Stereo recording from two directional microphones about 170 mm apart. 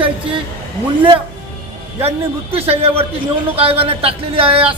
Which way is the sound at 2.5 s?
35° right (ahead or behind).